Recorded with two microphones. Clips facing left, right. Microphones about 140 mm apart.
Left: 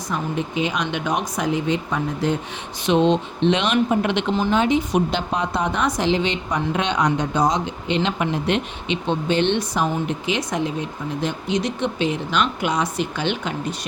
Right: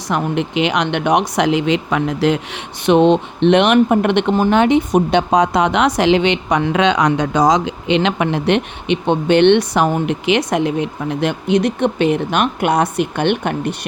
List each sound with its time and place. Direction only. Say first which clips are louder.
0.1 s a woman's voice: right 7 dB; 80° right
5.1 s a woman's voice: right 9 dB; 90° right; by 13.7 s 60° right (ahead or behind)